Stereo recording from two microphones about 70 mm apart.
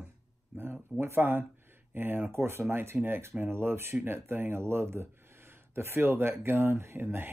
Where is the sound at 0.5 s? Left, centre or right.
Centre.